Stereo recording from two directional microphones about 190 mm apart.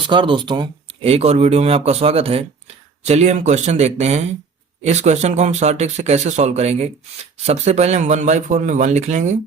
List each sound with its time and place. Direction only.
0.0 s speech: 25° right (ahead or behind)